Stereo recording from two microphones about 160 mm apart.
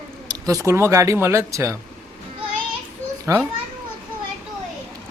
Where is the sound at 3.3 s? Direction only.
20° right (ahead or behind).